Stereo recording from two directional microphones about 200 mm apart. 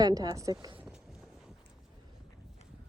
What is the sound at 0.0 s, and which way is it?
Speech, 20° right (ahead or behind).